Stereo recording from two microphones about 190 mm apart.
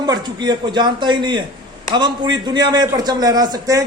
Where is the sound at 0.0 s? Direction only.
20° right (ahead or behind).